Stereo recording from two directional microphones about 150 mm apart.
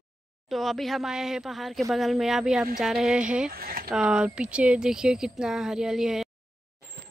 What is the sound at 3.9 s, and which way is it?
Speech, 5° right (ahead or behind).